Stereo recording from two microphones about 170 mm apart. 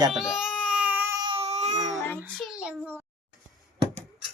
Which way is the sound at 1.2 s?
30° right (ahead or behind).